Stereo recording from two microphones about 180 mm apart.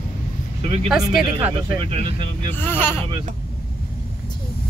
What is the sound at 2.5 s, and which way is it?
Speech, 10° left (ahead or behind).